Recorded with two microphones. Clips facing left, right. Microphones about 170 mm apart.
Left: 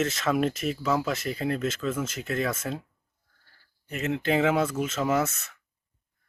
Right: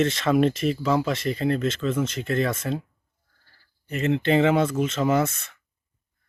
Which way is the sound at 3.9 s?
5° left (ahead or behind).